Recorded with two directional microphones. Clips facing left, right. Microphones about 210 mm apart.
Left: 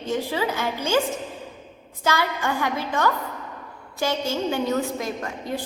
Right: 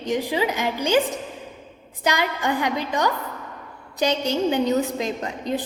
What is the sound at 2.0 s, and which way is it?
A woman's voice, 15° right (ahead or behind).